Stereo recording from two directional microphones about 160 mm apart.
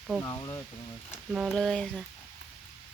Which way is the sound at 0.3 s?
20° left (ahead or behind).